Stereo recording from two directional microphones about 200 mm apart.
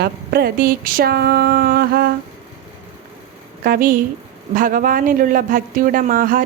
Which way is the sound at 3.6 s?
45° right (ahead or behind).